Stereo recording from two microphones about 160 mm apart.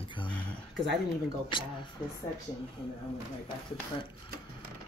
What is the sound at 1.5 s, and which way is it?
Speech, 30° left (ahead or behind).